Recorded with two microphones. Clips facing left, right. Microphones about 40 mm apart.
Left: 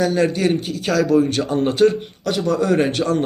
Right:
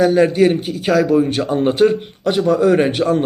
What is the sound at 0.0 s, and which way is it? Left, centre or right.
A man's voice, centre.